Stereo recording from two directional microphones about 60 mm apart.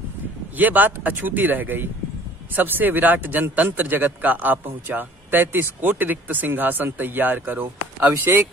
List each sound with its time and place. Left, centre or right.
0.6 s a man's voice: right